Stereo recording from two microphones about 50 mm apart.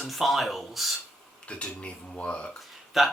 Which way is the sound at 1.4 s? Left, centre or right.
Left.